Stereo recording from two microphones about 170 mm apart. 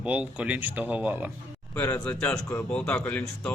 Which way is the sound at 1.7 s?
10° left (ahead or behind).